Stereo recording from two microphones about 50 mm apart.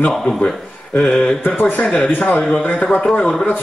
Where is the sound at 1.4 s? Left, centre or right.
Left.